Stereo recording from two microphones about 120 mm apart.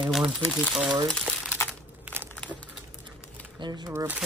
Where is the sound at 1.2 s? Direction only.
10° right (ahead or behind).